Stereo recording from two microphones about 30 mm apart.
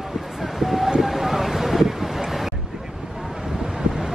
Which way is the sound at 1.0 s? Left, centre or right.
Centre.